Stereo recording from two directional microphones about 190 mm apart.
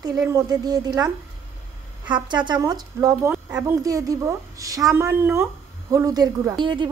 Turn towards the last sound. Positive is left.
turn(degrees=-25)  # may be behind; listen again after turning